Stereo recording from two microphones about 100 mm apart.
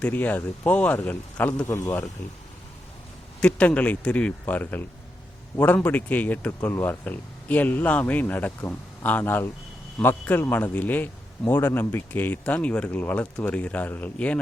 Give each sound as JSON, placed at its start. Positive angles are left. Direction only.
{"t": 0.0, "sound": "a man's voice", "side_deg": 15}
{"t": 1.6, "sound": "speech", "side_deg": 30}
{"t": 3.4, "sound": "a man's voice", "side_deg": 10}